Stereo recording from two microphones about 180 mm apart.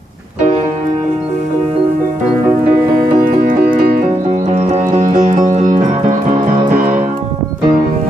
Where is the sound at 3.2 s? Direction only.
50° right (ahead or behind).